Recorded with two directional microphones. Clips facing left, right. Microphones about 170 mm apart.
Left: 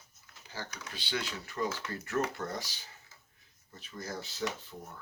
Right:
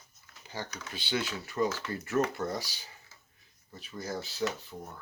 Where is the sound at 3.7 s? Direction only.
15° right (ahead or behind).